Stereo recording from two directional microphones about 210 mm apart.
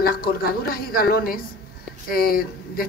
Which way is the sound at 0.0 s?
45° left (ahead or behind).